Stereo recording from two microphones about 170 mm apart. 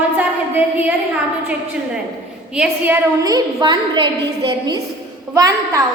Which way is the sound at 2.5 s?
5° right (ahead or behind).